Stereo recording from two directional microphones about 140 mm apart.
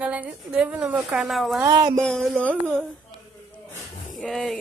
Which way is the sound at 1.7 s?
30° right (ahead or behind).